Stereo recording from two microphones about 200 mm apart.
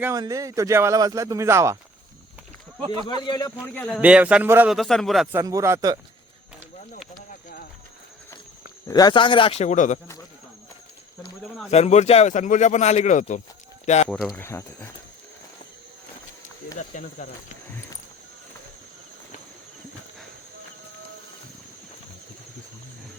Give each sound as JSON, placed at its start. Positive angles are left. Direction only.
{"t": 0.0, "sound": "speech", "side_deg": -15}
{"t": 2.8, "sound": "speech", "side_deg": -30}
{"t": 3.1, "sound": "speech", "side_deg": 20}
{"t": 3.8, "sound": "speech", "side_deg": 5}
{"t": 4.0, "sound": "a man's voice", "side_deg": -5}
{"t": 5.3, "sound": "speech", "side_deg": -15}
{"t": 8.9, "sound": "speech", "side_deg": 20}
{"t": 11.7, "sound": "speech", "side_deg": 35}
{"t": 14.1, "sound": "a man's voice", "side_deg": 5}
{"t": 16.9, "sound": "speech", "side_deg": 40}